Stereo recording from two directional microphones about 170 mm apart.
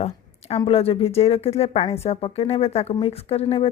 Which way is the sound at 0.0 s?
35° left (ahead or behind).